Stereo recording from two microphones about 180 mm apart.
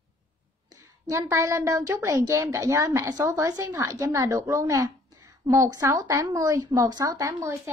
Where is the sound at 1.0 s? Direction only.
15° right (ahead or behind).